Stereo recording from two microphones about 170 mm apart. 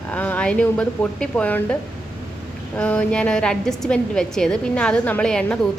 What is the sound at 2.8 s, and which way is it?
A woman's voice, 10° left (ahead or behind).